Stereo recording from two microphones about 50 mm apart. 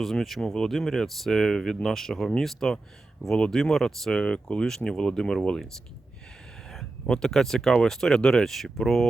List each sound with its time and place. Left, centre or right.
0.0 s speech: centre
4.1 s speech: left
4.6 s speech: centre
7.1 s speech: centre